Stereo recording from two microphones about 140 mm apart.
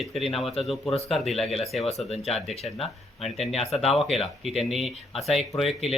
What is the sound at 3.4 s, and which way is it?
Speech, 50° left (ahead or behind).